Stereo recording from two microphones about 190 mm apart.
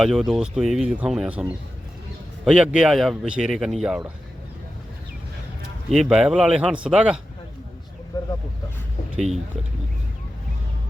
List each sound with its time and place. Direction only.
0.0 s a man's voice: centre (ahead or behind)
5.9 s a man's voice: centre (ahead or behind)
8.1 s vehicle: 20° left (ahead or behind)
9.1 s speech: 35° right (ahead or behind)